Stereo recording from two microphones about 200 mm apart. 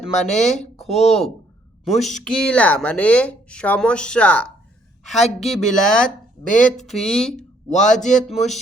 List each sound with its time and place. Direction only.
0.2 s speech: centre (ahead or behind)
6.5 s speech: 40° left (ahead or behind)
6.8 s speech: centre (ahead or behind)
7.9 s speech: 40° left (ahead or behind)